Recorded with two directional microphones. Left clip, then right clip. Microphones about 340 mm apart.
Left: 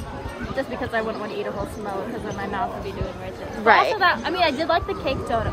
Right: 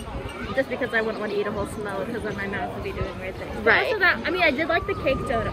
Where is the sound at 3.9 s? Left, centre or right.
Left.